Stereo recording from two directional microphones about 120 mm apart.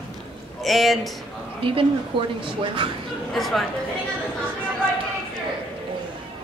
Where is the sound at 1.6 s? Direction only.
45° right (ahead or behind).